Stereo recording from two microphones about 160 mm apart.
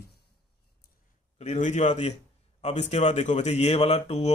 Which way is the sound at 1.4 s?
50° left (ahead or behind).